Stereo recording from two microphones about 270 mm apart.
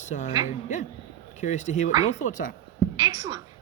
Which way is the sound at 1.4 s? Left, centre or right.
Left.